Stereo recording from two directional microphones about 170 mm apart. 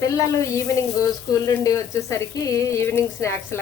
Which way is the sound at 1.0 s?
20° left (ahead or behind).